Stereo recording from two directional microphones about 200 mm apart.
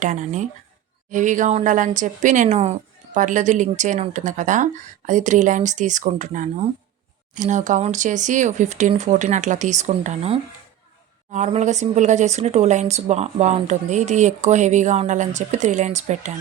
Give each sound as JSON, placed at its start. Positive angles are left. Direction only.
{"t": 0.0, "sound": "speech", "side_deg": -35}